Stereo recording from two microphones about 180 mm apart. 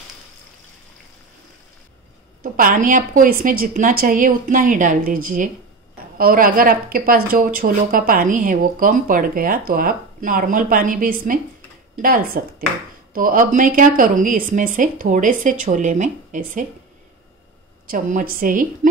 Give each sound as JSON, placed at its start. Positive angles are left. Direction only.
{"t": 2.4, "sound": "a woman's voice", "side_deg": -50}
{"t": 17.8, "sound": "a woman's voice", "side_deg": -50}